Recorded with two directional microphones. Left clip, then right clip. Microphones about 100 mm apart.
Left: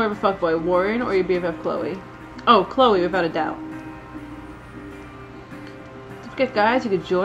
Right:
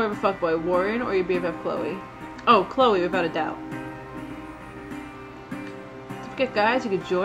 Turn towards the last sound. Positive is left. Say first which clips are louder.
# left 3 dB
turn(degrees=-10)  # may be behind; listen again after turning